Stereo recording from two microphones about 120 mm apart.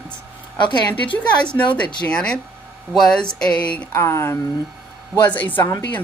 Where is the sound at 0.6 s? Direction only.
40° left (ahead or behind).